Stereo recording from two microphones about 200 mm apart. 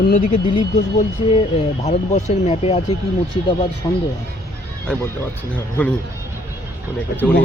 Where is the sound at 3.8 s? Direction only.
20° left (ahead or behind).